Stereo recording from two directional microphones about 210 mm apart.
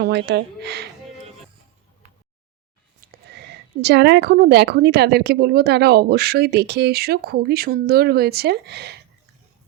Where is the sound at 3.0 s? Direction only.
50° right (ahead or behind).